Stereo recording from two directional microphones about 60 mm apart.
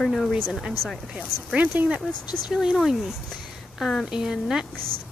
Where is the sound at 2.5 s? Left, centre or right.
Centre.